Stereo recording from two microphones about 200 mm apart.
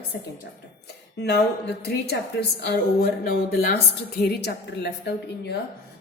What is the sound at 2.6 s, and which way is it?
Speech, 55° left (ahead or behind).